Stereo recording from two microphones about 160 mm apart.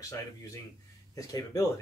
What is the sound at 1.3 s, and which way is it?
Speech, 20° left (ahead or behind).